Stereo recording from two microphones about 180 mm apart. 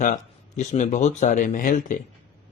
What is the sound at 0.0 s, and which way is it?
A man's voice, 45° left (ahead or behind).